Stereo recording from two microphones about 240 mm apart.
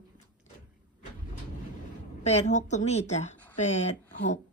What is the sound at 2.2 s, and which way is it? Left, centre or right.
Speech, left.